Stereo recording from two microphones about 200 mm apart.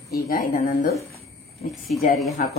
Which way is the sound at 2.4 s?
40° left (ahead or behind).